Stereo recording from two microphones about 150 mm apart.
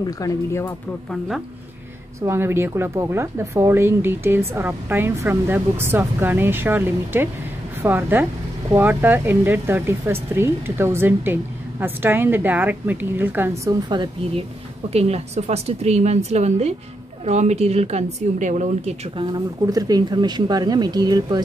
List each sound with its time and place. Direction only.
0.0 s speech: 20° left (ahead or behind)
2.2 s speech: 15° right (ahead or behind)
13.7 s speech: 30° right (ahead or behind)
14.9 s a woman's voice: 45° right (ahead or behind)
19.1 s speech: 25° right (ahead or behind)